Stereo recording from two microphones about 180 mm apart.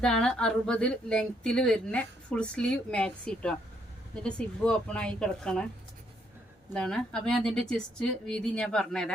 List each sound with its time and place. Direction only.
0.0 s a woman's voice: 5° left (ahead or behind)
6.7 s a woman's voice: 5° left (ahead or behind)